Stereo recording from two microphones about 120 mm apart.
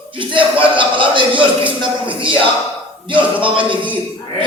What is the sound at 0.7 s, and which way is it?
Speech, 45° right (ahead or behind).